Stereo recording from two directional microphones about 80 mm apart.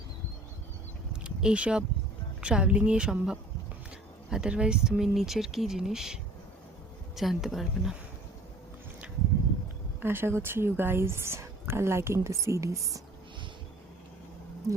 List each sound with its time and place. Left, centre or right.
1.1 s a sound: centre
2.4 s speech: centre
7.2 s speech: centre
10.0 s speech: right